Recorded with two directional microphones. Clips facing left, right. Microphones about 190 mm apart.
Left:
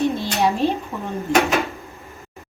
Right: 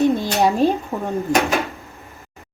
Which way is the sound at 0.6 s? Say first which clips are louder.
Right 3 dB; 45° right (ahead or behind).